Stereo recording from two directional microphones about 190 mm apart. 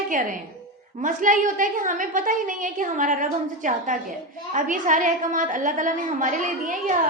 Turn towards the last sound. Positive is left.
turn(degrees=-45)  # may be behind; listen again after turning